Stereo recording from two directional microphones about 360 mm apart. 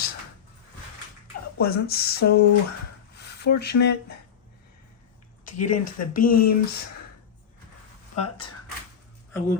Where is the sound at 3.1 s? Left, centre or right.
Left.